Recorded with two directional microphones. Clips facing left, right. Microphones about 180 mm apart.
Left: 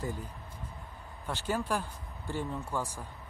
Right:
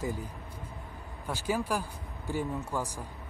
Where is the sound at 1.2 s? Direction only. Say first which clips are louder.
Right 2 dB; 10° right (ahead or behind).